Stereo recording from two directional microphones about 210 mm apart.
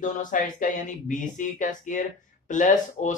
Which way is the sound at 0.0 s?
40° left (ahead or behind).